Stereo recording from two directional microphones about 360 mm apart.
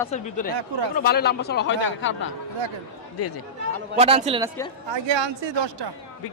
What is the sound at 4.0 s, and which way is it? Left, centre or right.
Speech, centre.